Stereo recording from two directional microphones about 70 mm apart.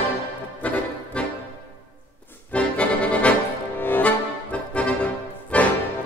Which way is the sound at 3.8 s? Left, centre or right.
Left.